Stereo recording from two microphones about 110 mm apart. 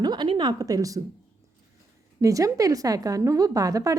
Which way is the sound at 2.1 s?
30° right (ahead or behind).